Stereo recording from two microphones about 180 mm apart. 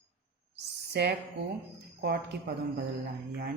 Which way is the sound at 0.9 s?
65° right (ahead or behind).